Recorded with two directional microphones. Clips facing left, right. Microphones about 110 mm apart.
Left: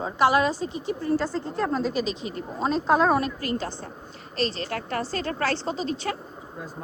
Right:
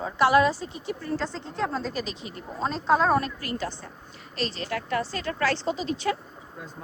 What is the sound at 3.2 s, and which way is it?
Speech, 25° left (ahead or behind).